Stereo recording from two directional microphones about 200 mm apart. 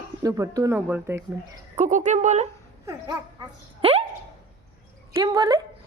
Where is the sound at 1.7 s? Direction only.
35° right (ahead or behind).